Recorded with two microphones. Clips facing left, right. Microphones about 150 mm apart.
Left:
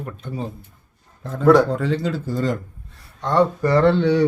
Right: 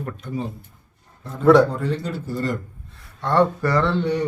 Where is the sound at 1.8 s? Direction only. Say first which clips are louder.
Left 3 dB; 90° left.